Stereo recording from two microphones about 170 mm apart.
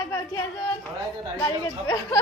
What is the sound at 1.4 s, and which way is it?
Speech, 20° left (ahead or behind).